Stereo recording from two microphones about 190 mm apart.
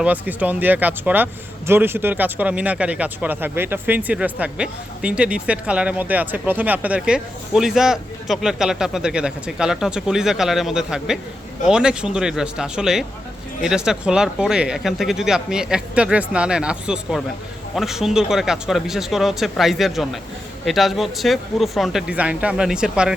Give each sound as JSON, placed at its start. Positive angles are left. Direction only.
{"t": 0.0, "sound": "speech", "side_deg": -10}